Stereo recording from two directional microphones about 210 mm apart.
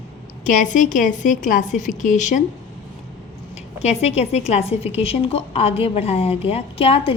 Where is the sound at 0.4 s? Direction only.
40° left (ahead or behind).